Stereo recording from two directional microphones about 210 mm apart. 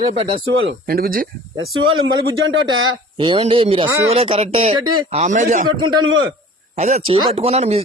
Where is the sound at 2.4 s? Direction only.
70° right (ahead or behind).